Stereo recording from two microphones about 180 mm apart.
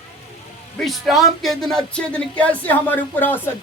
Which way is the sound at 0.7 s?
Centre (ahead or behind).